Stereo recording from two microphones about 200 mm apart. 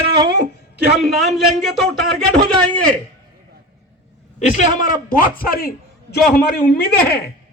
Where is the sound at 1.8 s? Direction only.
55° right (ahead or behind).